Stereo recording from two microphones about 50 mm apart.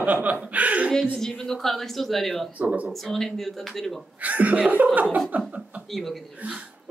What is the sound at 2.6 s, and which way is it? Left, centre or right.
Speech, right.